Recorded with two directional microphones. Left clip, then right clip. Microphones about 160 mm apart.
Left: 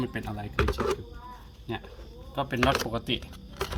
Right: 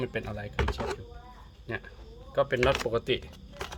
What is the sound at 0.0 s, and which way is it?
Speech, 45° right (ahead or behind).